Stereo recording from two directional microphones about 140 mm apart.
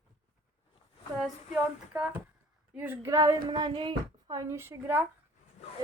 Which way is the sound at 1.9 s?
10° right (ahead or behind).